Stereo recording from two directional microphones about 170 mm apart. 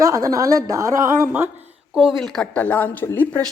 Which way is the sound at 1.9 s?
Centre (ahead or behind).